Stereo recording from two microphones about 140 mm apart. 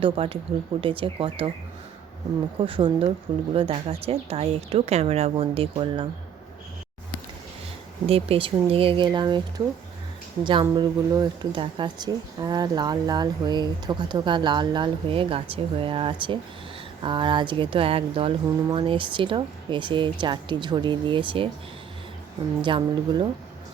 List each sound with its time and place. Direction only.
0.0 s speech: 40° right (ahead or behind)
2.6 s speech: 40° right (ahead or behind)
8.0 s speech: 45° right (ahead or behind)
10.4 s speech: 35° right (ahead or behind)
22.6 s speech: 35° right (ahead or behind)